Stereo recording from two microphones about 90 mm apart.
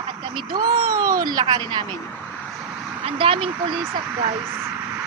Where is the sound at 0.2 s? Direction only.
65° right (ahead or behind).